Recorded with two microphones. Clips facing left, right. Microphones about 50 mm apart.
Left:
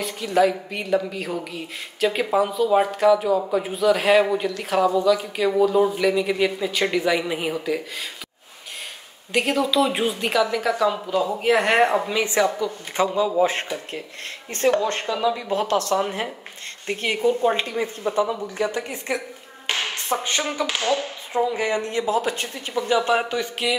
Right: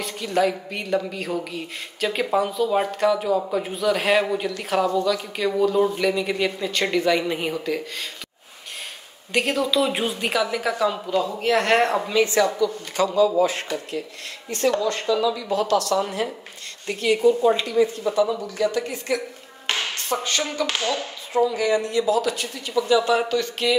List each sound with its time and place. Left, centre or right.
0.0 s speech: centre
9.3 s speech: centre
11.1 s a woman's voice: centre